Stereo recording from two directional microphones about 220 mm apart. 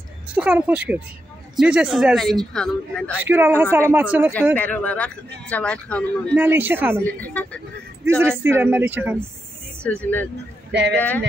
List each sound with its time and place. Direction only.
0.3 s a man's voice: 5° right (ahead or behind)
3.2 s speech: 10° right (ahead or behind)
4.6 s a man's voice: 5° left (ahead or behind)
6.3 s speech: 10° right (ahead or behind)
7.0 s speech: 5° left (ahead or behind)
8.0 s speech: 10° right (ahead or behind)
9.8 s speech: 10° left (ahead or behind)
10.7 s speech: 50° right (ahead or behind)
11.0 s speech: 10° left (ahead or behind)